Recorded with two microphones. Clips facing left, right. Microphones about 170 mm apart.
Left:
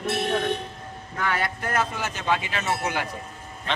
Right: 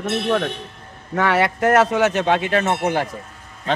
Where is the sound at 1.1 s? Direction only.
75° right (ahead or behind); by 2.9 s 60° right (ahead or behind).